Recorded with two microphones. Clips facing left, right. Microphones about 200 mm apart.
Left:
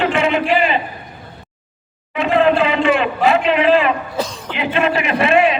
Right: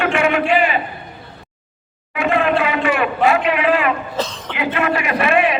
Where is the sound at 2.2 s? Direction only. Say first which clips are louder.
Left 3 dB; 25° left (ahead or behind).